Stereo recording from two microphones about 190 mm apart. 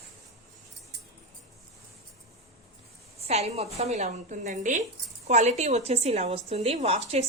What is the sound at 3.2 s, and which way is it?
A woman's voice, 35° right (ahead or behind).